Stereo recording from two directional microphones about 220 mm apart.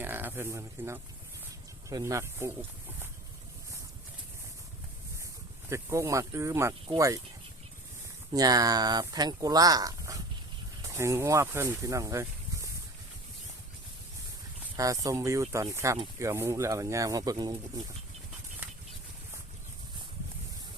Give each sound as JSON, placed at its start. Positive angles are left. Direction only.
{"t": 0.0, "sound": "speech", "side_deg": -10}
{"t": 5.6, "sound": "speech", "side_deg": -10}
{"t": 8.3, "sound": "speech", "side_deg": -15}
{"t": 14.8, "sound": "speech", "side_deg": -15}